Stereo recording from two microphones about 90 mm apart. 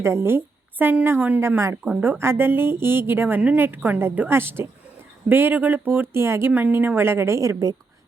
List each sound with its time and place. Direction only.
0.0 s speech: 30° right (ahead or behind)